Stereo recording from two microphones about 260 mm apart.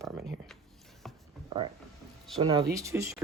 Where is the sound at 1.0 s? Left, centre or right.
Centre.